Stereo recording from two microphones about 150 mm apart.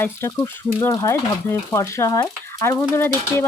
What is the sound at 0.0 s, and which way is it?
Speech, 20° left (ahead or behind).